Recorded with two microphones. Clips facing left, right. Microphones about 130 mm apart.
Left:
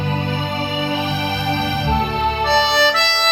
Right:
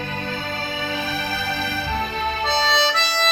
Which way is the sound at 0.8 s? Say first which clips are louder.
Left 6 dB; 20° left (ahead or behind).